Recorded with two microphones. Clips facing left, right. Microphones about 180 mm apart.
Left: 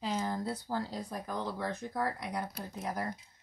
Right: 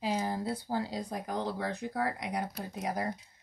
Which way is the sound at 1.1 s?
75° right (ahead or behind).